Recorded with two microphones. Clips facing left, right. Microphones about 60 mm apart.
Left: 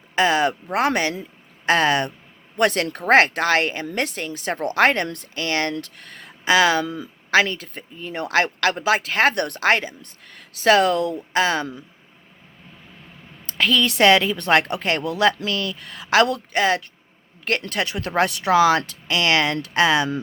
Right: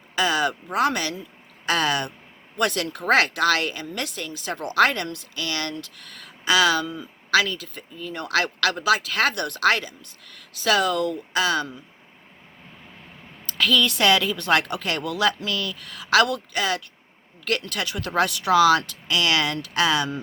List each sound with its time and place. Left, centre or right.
0.2 s speech: left
13.5 s speech: left